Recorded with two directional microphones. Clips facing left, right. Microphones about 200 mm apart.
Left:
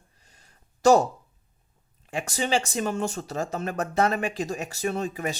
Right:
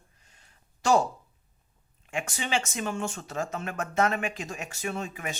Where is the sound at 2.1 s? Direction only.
35° left (ahead or behind).